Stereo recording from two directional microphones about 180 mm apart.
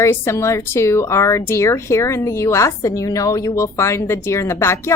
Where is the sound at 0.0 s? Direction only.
15° left (ahead or behind).